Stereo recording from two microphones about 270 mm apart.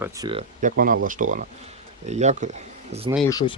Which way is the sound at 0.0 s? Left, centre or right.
Centre.